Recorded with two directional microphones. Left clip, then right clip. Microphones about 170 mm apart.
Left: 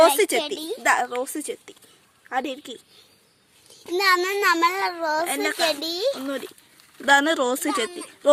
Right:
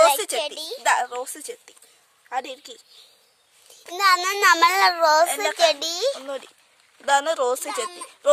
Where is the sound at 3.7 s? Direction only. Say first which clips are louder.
Right 1 dB; 40° right (ahead or behind); by 5.2 s 70° right (ahead or behind).